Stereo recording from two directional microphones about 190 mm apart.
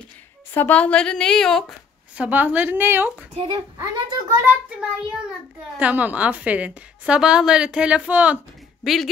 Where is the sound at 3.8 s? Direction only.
10° right (ahead or behind).